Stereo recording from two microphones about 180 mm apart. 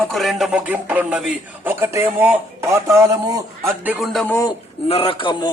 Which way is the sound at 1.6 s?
15° right (ahead or behind).